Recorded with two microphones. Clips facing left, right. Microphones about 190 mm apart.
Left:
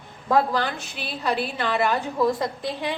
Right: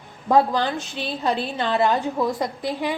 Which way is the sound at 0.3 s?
15° right (ahead or behind).